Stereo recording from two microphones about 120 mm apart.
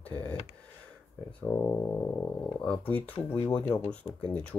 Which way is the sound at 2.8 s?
10° left (ahead or behind).